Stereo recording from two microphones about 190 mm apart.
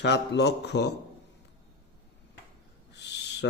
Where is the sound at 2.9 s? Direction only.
65° left (ahead or behind).